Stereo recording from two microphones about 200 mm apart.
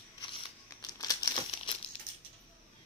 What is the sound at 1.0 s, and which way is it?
Crumpling, 20° left (ahead or behind).